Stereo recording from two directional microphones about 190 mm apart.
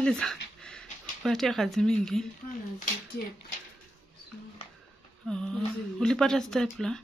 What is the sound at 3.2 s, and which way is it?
Speech, 50° left (ahead or behind).